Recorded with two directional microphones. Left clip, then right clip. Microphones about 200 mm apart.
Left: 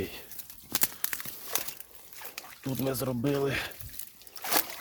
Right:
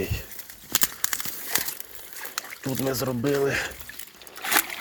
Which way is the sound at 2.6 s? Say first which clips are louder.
Right 4 dB; centre (ahead or behind).